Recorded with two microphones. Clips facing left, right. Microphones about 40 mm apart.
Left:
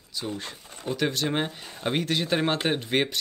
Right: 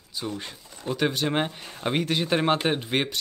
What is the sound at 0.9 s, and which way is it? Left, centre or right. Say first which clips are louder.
Speech: right 1 dB; centre.